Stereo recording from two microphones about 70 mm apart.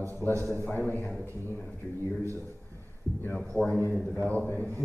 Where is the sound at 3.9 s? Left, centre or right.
Centre.